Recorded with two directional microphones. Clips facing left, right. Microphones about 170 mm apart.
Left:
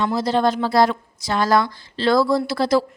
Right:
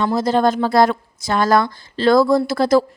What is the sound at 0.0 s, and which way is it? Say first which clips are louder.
A woman's voice: right 3 dB; 50° right (ahead or behind).